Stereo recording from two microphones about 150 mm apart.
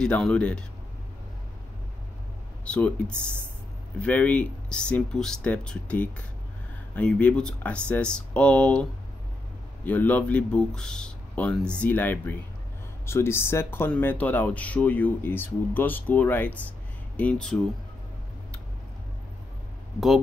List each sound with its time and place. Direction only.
0.0 s speech: 5° left (ahead or behind)
2.6 s speech: 5° left (ahead or behind)
9.8 s speech: 10° left (ahead or behind)